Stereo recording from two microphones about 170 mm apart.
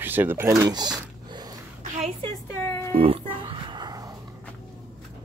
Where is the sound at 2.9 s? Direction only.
35° right (ahead or behind).